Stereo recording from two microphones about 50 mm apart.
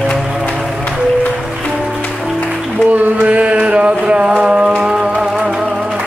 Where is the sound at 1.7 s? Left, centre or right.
Centre.